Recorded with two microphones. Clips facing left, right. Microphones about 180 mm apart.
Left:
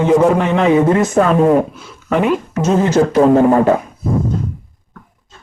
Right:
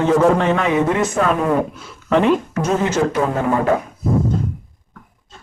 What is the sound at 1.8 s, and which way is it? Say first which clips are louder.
Speech: even; centre (ahead or behind).